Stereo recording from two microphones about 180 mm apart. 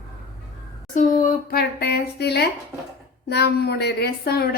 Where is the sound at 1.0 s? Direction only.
45° left (ahead or behind).